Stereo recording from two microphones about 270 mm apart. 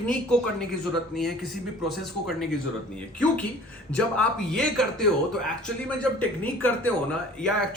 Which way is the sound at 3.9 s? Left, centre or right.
Centre.